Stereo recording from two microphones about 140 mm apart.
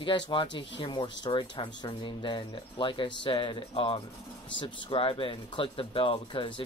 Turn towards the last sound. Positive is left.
turn(degrees=35)  # may be behind; listen again after turning